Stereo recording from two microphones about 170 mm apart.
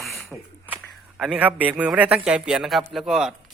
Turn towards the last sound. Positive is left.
turn(degrees=0)  # may be behind; listen again after turning